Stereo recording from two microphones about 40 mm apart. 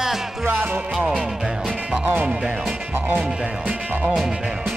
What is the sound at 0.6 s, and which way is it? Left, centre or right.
Music, right.